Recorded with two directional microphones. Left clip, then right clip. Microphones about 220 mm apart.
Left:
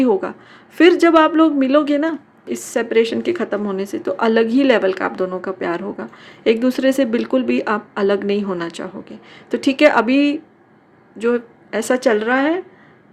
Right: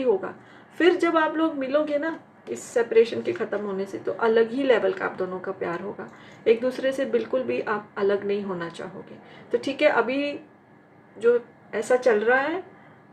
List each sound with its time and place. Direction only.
0.8 s a woman's voice: 50° left (ahead or behind)